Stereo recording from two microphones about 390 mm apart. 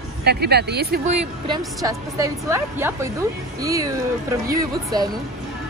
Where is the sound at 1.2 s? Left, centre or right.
Centre.